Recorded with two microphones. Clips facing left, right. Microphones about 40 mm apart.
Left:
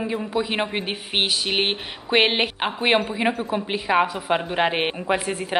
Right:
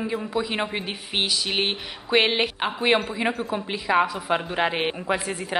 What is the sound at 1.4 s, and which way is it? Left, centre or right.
Speech, left.